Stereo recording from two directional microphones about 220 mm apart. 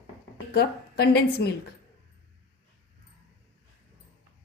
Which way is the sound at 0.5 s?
45° left (ahead or behind).